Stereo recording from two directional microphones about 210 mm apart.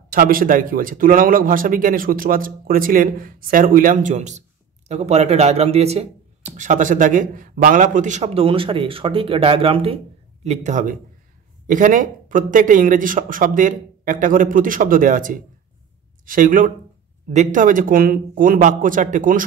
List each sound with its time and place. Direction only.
0.1 s speech: 40° right (ahead or behind)